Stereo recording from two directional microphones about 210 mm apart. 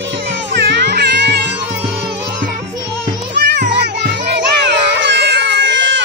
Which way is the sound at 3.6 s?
55° right (ahead or behind).